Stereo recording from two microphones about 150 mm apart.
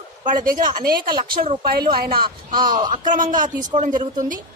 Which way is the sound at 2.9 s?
60° right (ahead or behind).